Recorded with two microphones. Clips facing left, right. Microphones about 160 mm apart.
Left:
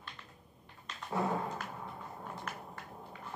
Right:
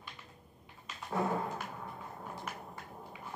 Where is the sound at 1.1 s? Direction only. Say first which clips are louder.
Even; centre (ahead or behind).